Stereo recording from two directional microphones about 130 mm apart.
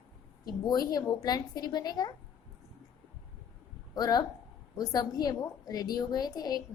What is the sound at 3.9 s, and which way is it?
A woman's voice, 30° left (ahead or behind).